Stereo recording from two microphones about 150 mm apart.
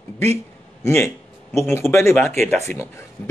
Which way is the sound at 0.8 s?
15° left (ahead or behind).